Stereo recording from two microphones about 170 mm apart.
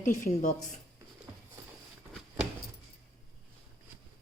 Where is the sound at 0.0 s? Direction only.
50° left (ahead or behind).